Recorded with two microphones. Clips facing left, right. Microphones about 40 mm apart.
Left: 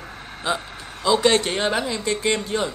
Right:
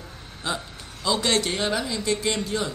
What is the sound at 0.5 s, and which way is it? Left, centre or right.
Speech, centre.